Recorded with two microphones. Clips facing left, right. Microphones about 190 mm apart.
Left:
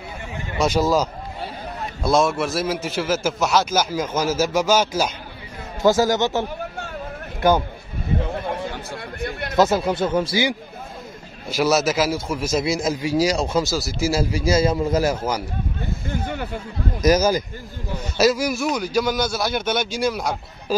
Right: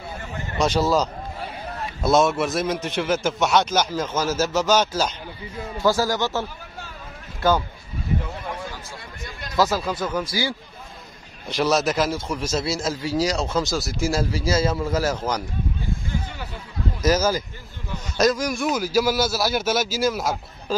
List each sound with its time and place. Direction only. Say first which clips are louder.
0.6 s a man's voice: left 1 dB; 10° left (ahead or behind)
2.0 s a man's voice: even; centre (ahead or behind)
5.8 s speech: left 4 dB; 20° left (ahead or behind)
8.3 s a sound: left 6 dB; 60° left (ahead or behind)
9.6 s speech: left 4 dB; 20° left (ahead or behind)
11.4 s a man's voice: left 2 dB; 5° left (ahead or behind)
13.7 s a man's voice: left 2 dB; centre (ahead or behind)
14.3 s a man's voice: left 3 dB; 15° left (ahead or behind)
17.0 s a man's voice: left 3 dB; 15° left (ahead or behind); by 20.7 s centre (ahead or behind)